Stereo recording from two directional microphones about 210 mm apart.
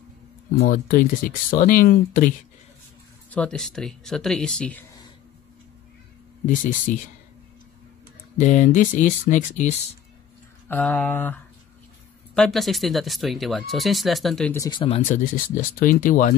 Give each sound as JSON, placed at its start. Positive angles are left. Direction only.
{"t": 0.6, "sound": "speech", "side_deg": 45}
{"t": 3.3, "sound": "speech", "side_deg": 5}
{"t": 6.4, "sound": "speech", "side_deg": 35}
{"t": 8.4, "sound": "speech", "side_deg": 35}
{"t": 10.7, "sound": "speech", "side_deg": 5}
{"t": 14.6, "sound": "speech", "side_deg": 20}
{"t": 15.0, "sound": "speech", "side_deg": 40}